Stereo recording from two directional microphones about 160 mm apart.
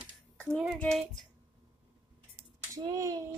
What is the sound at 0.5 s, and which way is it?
Speech, centre (ahead or behind).